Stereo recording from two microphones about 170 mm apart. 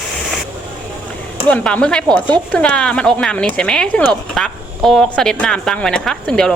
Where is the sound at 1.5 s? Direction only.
5° left (ahead or behind).